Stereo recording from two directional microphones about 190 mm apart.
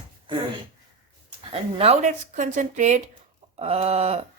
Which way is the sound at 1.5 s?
30° right (ahead or behind).